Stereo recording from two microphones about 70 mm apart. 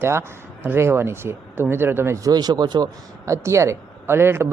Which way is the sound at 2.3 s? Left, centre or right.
Right.